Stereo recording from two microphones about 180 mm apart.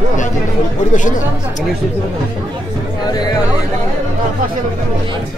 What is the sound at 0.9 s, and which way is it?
Speech, 45° left (ahead or behind).